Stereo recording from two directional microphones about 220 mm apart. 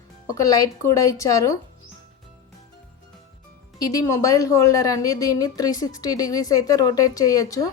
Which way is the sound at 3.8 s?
15° left (ahead or behind).